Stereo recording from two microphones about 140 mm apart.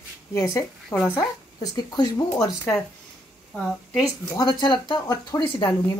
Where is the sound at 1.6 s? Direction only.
30° left (ahead or behind).